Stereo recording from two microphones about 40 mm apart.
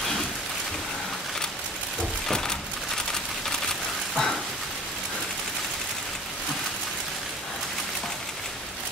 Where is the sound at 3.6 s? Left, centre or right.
Centre.